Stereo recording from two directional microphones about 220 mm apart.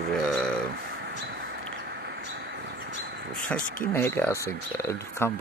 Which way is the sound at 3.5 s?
10° left (ahead or behind).